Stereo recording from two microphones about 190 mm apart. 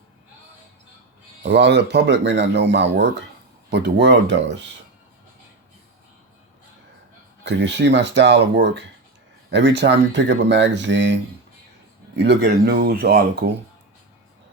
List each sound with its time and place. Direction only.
1.4 s speech: 65° right (ahead or behind)
7.4 s speech: 70° right (ahead or behind)